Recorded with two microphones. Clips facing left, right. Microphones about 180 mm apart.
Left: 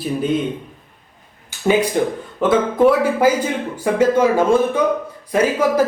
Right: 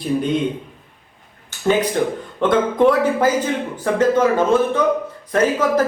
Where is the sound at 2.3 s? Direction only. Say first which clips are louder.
Left 1 dB; 5° left (ahead or behind).